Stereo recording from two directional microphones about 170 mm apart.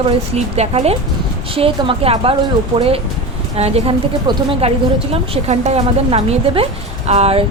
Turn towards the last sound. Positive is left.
turn(degrees=-35)  # may be behind; listen again after turning